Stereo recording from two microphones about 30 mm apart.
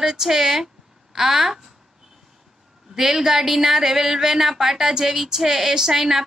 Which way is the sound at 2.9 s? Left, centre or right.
Centre.